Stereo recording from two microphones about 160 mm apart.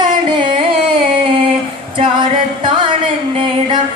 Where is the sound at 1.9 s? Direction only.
30° right (ahead or behind).